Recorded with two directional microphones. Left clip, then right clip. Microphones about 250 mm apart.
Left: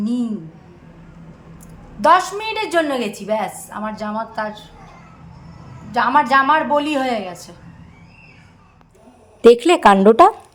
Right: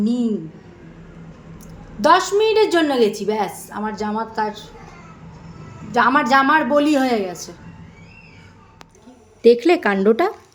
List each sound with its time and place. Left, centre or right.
0.0 s a woman's voice: centre
2.0 s a woman's voice: centre
5.9 s a woman's voice: centre
9.4 s a woman's voice: centre